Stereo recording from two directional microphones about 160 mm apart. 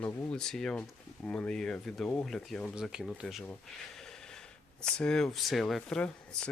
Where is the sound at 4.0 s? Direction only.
5° left (ahead or behind).